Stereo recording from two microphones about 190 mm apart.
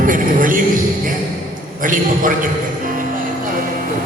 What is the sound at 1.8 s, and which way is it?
Speech, 45° right (ahead or behind).